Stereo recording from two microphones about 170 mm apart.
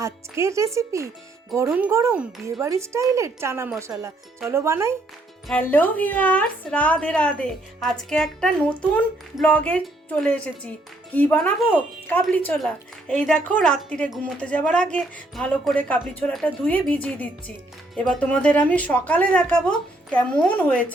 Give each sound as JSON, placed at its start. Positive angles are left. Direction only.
{"t": 0.0, "sound": "speech", "side_deg": -15}
{"t": 5.5, "sound": "speech", "side_deg": 10}